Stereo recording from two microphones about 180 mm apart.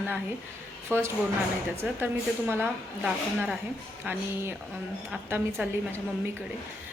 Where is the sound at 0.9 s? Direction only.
10° left (ahead or behind).